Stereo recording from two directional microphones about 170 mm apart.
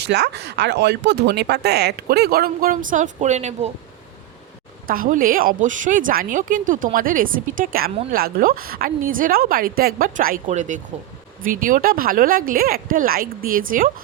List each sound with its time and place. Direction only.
0.0 s speech: 75° right (ahead or behind); by 3.7 s 40° right (ahead or behind)
4.9 s speech: 55° right (ahead or behind)